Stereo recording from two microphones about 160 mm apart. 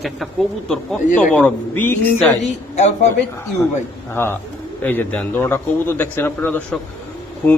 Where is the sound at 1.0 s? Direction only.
55° left (ahead or behind).